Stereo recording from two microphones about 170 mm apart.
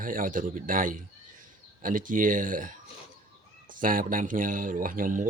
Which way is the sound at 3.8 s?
55° right (ahead or behind).